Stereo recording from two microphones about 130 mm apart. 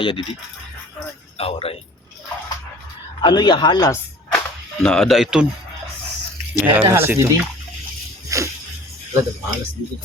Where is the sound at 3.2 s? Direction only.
35° left (ahead or behind).